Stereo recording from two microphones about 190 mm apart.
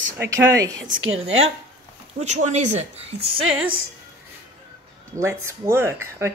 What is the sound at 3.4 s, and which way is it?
Speech, 90° right.